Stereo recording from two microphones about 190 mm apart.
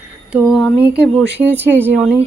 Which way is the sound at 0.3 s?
5° right (ahead or behind).